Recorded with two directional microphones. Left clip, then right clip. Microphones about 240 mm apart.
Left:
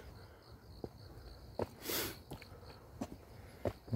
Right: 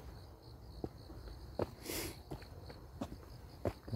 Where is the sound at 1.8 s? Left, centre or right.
Left.